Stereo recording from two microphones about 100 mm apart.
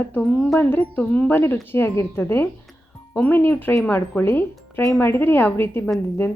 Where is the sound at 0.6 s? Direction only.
15° left (ahead or behind).